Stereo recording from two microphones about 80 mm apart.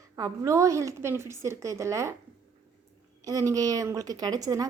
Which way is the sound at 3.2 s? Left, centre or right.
Right.